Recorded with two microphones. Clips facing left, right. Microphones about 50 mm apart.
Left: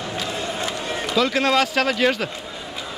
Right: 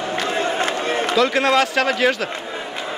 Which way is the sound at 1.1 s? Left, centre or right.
Centre.